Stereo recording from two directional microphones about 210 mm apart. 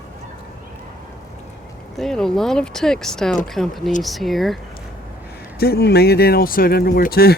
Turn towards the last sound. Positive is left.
turn(degrees=45)  # may be behind; listen again after turning